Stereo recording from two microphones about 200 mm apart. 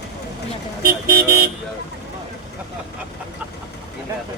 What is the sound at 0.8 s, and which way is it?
Speech, 50° right (ahead or behind).